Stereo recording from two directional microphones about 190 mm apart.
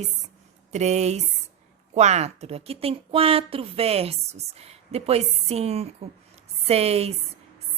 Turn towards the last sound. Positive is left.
turn(degrees=-30)  # may be behind; listen again after turning